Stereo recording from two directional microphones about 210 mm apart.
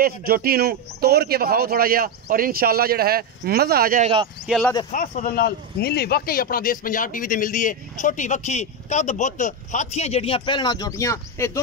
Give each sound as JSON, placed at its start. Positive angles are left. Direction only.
{"t": 0.0, "sound": "a man's voice", "side_deg": -45}
{"t": 4.5, "sound": "speech", "side_deg": 0}
{"t": 4.9, "sound": "speech", "side_deg": 40}